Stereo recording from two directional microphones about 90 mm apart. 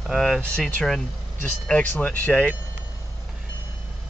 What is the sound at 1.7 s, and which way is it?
Speech, 15° left (ahead or behind).